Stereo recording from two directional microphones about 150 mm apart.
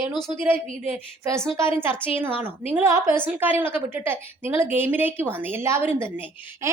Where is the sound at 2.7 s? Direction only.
15° right (ahead or behind).